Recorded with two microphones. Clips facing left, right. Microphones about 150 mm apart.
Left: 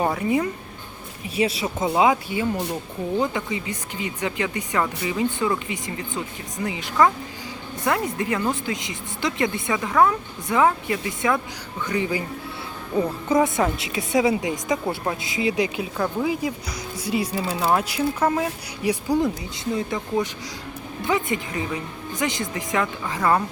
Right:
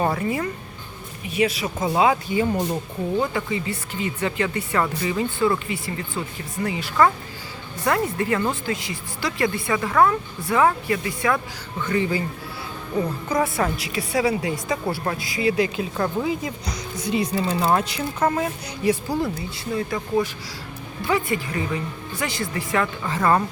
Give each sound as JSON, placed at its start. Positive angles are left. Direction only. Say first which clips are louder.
{"t": 0.0, "sound": "speech", "louder": "left 1 dB", "side_deg": 15}
{"t": 1.3, "sound": "a woman's voice", "louder": "right 1 dB", "side_deg": 30}
{"t": 1.6, "sound": "speech", "louder": "left 2 dB", "side_deg": 15}
{"t": 2.4, "sound": "speech", "louder": "right 3 dB", "side_deg": 0}
{"t": 3.2, "sound": "a woman's voice", "louder": "even", "side_deg": 15}
{"t": 21.0, "sound": "a woman's voice", "louder": "right 1 dB", "side_deg": 20}